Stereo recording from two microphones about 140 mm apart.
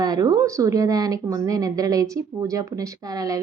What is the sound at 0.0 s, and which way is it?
A woman's voice, 30° right (ahead or behind).